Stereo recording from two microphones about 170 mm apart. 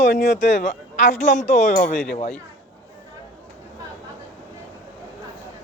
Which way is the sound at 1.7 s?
55° left (ahead or behind).